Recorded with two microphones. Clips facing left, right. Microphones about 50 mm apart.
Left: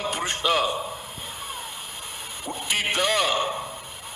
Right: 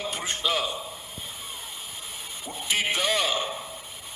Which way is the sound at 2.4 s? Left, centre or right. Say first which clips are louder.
Left 1 dB; centre.